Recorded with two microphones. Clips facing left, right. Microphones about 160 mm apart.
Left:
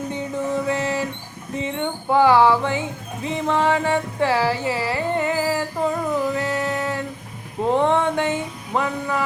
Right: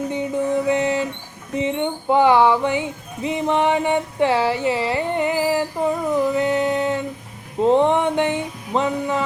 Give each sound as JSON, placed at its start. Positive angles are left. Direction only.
{"t": 0.1, "sound": "music", "side_deg": -20}